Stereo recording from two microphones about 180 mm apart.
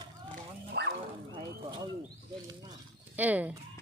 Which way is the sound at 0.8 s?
70° right (ahead or behind).